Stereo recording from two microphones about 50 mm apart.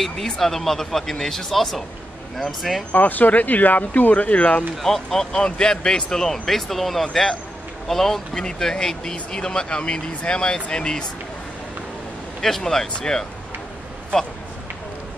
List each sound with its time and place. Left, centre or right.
0.0 s speech: centre
2.9 s speech: left
4.8 s speech: centre
12.4 s speech: centre